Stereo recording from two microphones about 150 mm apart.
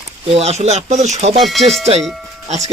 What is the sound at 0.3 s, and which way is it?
Speech, 45° right (ahead or behind).